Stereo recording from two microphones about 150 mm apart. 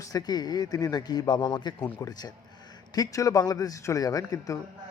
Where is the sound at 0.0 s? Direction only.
25° left (ahead or behind).